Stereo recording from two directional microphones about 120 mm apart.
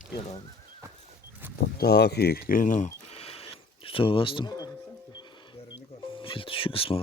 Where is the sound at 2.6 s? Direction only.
90° left.